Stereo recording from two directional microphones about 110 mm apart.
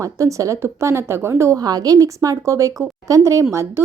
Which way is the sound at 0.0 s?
30° right (ahead or behind).